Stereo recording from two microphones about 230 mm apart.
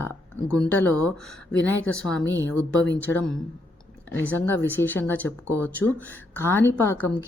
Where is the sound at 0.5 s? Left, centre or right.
Centre.